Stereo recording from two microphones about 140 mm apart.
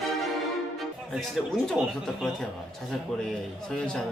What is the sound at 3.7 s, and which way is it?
Speech, 5° left (ahead or behind).